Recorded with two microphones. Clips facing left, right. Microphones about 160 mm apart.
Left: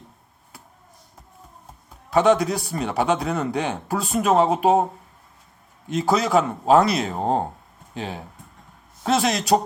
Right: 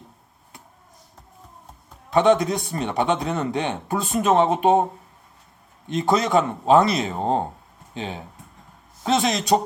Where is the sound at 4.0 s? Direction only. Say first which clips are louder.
Even; centre (ahead or behind).